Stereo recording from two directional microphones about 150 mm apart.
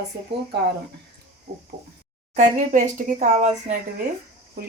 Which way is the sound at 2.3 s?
60° right (ahead or behind).